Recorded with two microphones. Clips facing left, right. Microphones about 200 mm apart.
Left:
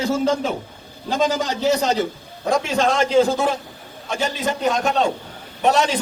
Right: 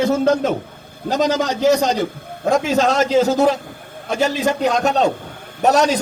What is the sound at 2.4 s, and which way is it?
A man's voice, 40° right (ahead or behind).